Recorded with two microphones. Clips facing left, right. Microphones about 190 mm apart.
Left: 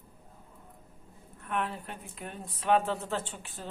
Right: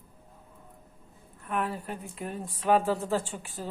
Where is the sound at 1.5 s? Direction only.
5° right (ahead or behind).